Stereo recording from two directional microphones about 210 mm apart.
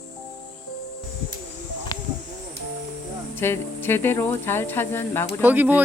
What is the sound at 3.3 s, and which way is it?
Speech, 10° left (ahead or behind).